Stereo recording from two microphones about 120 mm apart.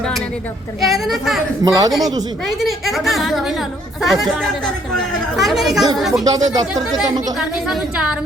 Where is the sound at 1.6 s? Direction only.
30° right (ahead or behind).